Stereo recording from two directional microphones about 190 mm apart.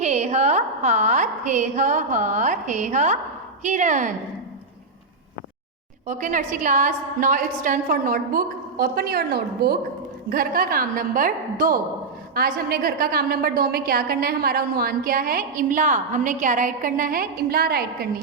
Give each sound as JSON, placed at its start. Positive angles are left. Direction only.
{"t": 0.0, "sound": "a woman's voice", "side_deg": -35}
{"t": 6.1, "sound": "a woman's voice", "side_deg": -40}